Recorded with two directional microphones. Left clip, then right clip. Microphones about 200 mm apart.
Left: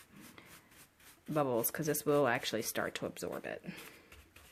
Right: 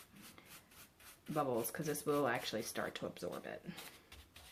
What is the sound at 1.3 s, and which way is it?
Speech, 50° left (ahead or behind).